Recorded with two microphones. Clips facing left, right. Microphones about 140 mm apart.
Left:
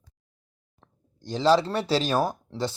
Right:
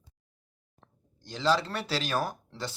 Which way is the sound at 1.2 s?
35° left (ahead or behind).